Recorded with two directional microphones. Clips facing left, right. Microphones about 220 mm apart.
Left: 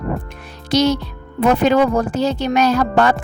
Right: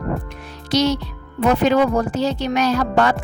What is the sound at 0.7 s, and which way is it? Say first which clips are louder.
Speech: left 2 dB; 50° left (ahead or behind).